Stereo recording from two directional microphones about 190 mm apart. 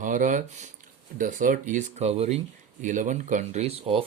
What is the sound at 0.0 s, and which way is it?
Speech, 45° right (ahead or behind).